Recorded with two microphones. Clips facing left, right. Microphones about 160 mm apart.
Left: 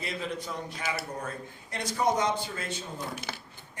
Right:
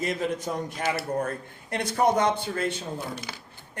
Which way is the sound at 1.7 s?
60° right (ahead or behind).